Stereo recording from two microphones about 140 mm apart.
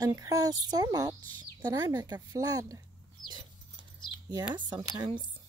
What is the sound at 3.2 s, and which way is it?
Dog, 30° right (ahead or behind).